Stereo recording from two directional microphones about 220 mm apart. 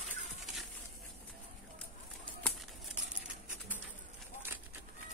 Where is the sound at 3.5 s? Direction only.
5° right (ahead or behind).